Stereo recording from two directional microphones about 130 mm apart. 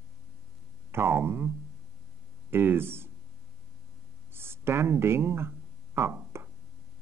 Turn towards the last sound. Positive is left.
turn(degrees=-15)  # may be behind; listen again after turning